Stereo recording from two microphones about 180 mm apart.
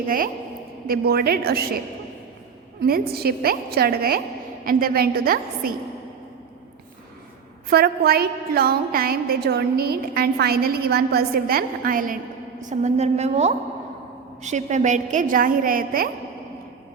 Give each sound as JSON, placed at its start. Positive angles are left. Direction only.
{"t": 0.9, "sound": "a woman's voice", "side_deg": -55}
{"t": 2.8, "sound": "a woman's voice", "side_deg": -55}
{"t": 7.7, "sound": "a woman's voice", "side_deg": -60}